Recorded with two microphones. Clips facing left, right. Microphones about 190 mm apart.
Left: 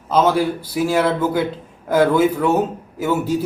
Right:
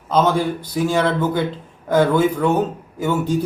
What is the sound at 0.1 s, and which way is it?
A man's voice, 5° left (ahead or behind).